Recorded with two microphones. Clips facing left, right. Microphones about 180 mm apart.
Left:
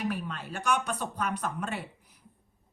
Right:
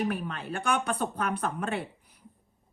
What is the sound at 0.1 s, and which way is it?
Speech, 55° right (ahead or behind).